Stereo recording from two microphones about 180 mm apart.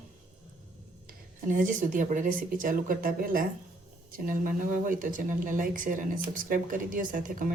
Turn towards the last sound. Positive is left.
turn(degrees=-45)  # may be behind; listen again after turning